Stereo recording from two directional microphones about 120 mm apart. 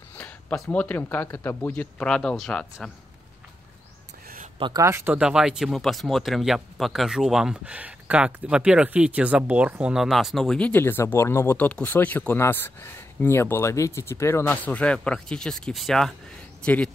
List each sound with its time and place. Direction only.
0.1 s a sound: 10° left (ahead or behind)
0.7 s speech: 15° left (ahead or behind)
4.6 s speech: 40° right (ahead or behind)
4.8 s speech: 20° right (ahead or behind)
5.1 s speech: 5° right (ahead or behind)
10.7 s speech: 20° left (ahead or behind)